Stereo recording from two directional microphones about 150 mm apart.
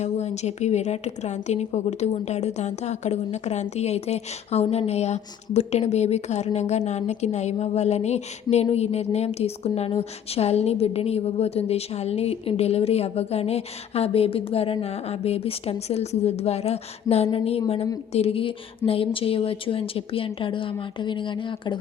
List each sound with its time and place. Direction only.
0.0 s a woman's voice: 45° left (ahead or behind)